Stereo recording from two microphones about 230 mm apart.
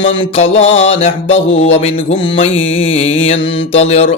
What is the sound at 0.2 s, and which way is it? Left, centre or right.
A man's voice, left.